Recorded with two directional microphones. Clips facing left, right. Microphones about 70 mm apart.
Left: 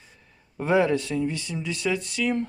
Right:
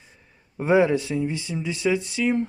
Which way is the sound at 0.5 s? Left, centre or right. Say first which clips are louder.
Right 3 dB; right.